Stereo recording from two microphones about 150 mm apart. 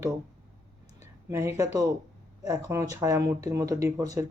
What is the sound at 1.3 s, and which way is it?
Speech, 20° right (ahead or behind).